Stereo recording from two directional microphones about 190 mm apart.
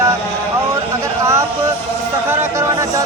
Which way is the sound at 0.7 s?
15° right (ahead or behind).